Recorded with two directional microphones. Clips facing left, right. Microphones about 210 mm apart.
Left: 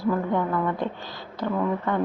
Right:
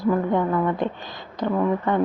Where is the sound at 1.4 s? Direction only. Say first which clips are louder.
Right 3 dB; 20° right (ahead or behind).